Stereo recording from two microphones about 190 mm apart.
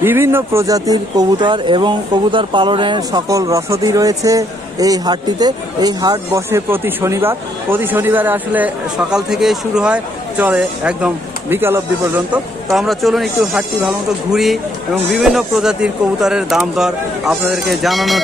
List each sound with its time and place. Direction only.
0.0 s speech: 10° right (ahead or behind)